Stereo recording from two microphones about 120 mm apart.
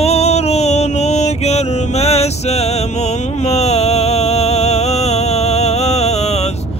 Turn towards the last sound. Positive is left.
turn(degrees=65)  # may be behind; listen again after turning